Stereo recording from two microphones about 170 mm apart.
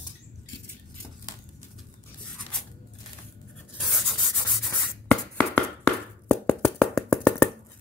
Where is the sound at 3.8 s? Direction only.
Centre (ahead or behind).